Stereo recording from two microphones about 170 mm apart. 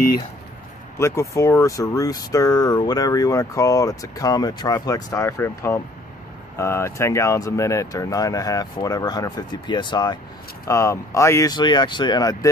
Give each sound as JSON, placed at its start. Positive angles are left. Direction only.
{"t": 0.9, "sound": "speech", "side_deg": 15}